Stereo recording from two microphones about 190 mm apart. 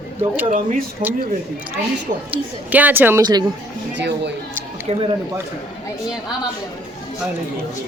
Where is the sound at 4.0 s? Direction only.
65° right (ahead or behind).